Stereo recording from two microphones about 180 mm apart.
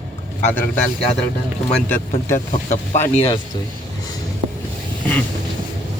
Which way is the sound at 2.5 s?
40° left (ahead or behind).